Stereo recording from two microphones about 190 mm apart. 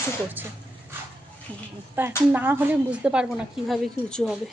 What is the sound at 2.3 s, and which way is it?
A woman's voice, 10° right (ahead or behind).